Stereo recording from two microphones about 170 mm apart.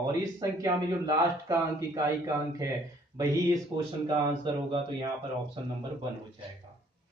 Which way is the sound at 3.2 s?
20° right (ahead or behind).